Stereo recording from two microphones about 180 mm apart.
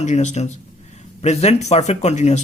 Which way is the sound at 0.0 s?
40° left (ahead or behind).